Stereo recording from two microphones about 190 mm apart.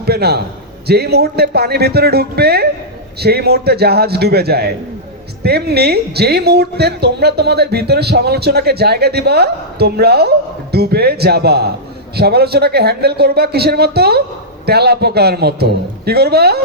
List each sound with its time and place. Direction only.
0.0 s a woman's voice: 55° right (ahead or behind)